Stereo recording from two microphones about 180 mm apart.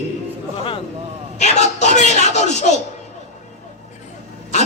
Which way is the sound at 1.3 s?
40° left (ahead or behind).